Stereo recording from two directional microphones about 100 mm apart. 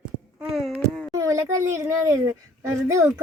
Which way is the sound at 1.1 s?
35° right (ahead or behind).